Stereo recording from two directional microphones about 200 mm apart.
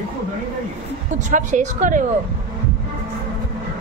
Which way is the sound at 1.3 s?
40° right (ahead or behind).